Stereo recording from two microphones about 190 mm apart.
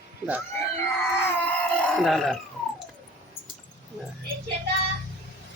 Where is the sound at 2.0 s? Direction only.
Centre (ahead or behind).